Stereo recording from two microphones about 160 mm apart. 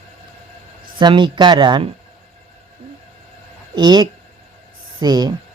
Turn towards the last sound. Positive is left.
turn(degrees=-25)  # may be behind; listen again after turning